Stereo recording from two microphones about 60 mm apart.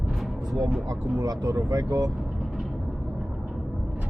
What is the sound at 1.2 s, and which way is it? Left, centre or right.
Speech, right.